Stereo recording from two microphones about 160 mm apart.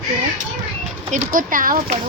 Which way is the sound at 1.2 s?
60° right (ahead or behind).